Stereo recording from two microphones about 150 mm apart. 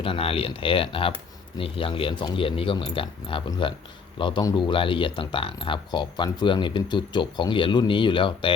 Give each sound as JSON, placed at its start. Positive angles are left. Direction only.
{"t": 0.0, "sound": "speech", "side_deg": 40}